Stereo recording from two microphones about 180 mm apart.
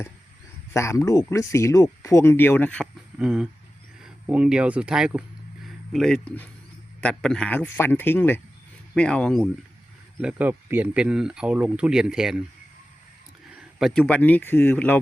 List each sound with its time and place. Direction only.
0.7 s speech: 15° left (ahead or behind)
3.2 s speech: 5° right (ahead or behind)
10.2 s speech: 10° right (ahead or behind)
13.7 s speech: centre (ahead or behind)